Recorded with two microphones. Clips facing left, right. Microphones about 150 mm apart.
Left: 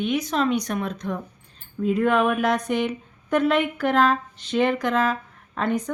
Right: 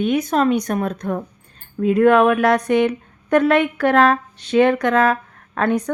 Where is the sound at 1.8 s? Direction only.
65° right (ahead or behind).